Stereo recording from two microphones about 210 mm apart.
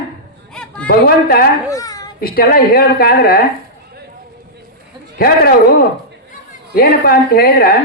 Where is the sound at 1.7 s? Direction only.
15° left (ahead or behind).